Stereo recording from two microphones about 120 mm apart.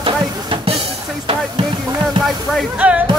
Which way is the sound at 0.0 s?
50° right (ahead or behind).